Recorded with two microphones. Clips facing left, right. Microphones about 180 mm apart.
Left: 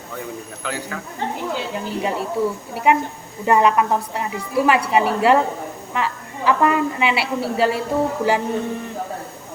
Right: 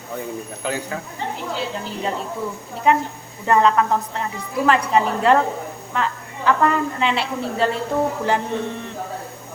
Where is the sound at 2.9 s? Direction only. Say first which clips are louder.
Left 1 dB; 10° left (ahead or behind).